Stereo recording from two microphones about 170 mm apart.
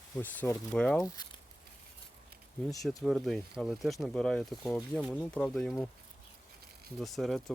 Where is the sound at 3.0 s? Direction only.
Centre (ahead or behind).